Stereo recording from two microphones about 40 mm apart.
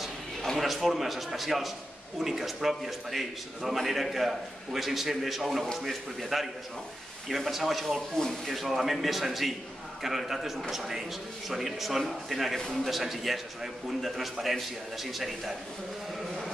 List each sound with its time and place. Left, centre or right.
0.6 s a man's voice: centre
8.2 s speech: centre
8.5 s a man's voice: centre